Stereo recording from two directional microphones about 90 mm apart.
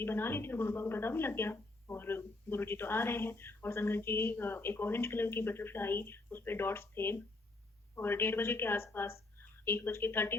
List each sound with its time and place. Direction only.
0.0 s speech: 25° left (ahead or behind)